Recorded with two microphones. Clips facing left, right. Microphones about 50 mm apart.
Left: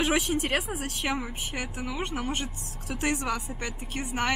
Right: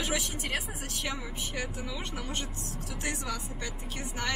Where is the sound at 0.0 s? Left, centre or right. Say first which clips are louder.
Left 7 dB; left.